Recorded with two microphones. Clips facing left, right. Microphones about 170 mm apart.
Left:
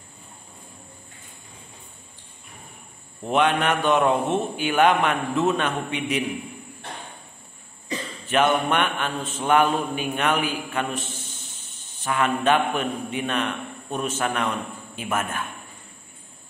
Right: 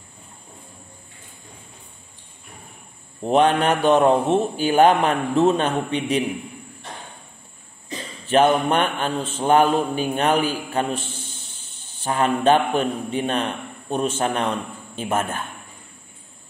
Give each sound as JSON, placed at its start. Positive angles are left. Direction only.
{"t": 3.3, "sound": "a man's voice", "side_deg": -35}
{"t": 8.3, "sound": "a man's voice", "side_deg": -35}